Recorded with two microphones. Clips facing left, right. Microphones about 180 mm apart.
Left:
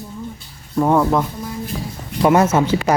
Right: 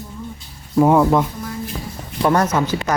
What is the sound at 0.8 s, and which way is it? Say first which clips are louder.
Speech: right 2 dB; 5° right (ahead or behind).